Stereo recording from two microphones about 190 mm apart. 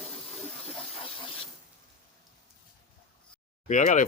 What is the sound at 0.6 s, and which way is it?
Hiss, 30° left (ahead or behind).